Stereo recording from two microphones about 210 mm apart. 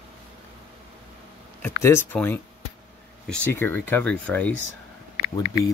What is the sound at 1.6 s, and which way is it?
Speech, 10° left (ahead or behind).